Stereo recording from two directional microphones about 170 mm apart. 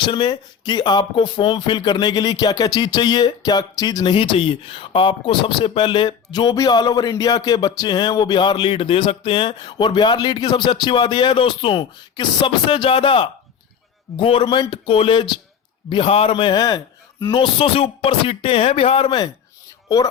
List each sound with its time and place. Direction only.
0.0 s a man's voice: 25° left (ahead or behind)
17.3 s speech: 30° left (ahead or behind)